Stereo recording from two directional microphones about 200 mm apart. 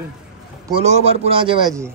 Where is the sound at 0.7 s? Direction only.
30° right (ahead or behind).